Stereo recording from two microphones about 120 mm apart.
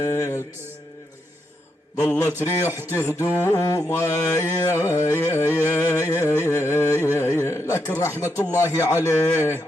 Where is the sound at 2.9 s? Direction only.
25° left (ahead or behind).